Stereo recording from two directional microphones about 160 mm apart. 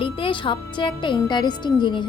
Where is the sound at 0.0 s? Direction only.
35° left (ahead or behind).